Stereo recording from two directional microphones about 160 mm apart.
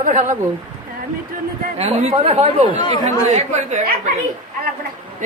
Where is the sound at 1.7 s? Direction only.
45° right (ahead or behind).